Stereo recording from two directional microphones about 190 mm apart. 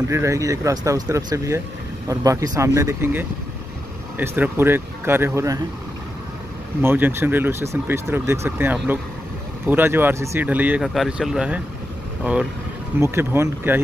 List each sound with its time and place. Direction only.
0.1 s speech: 15° right (ahead or behind)
6.8 s speech: 10° right (ahead or behind)